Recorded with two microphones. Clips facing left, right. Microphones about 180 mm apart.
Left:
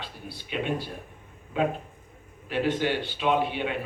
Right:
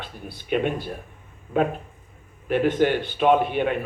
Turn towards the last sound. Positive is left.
turn(degrees=-50)  # may be behind; listen again after turning